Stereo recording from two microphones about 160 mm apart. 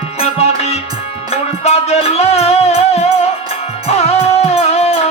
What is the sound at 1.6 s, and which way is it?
Music, 40° left (ahead or behind).